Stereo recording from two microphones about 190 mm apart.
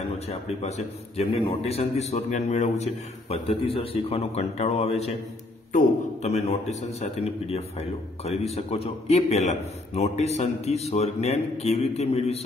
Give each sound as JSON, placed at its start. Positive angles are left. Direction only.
{"t": 0.3, "sound": "a man's voice", "side_deg": 35}